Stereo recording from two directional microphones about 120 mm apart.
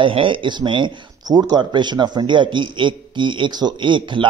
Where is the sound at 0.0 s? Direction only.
45° right (ahead or behind).